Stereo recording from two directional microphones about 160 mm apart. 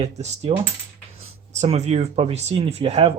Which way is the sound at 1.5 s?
45° right (ahead or behind).